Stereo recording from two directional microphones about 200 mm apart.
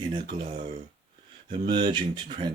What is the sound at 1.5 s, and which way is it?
Speech, 25° right (ahead or behind).